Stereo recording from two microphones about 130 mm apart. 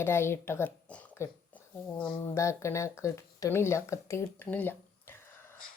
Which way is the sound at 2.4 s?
20° left (ahead or behind).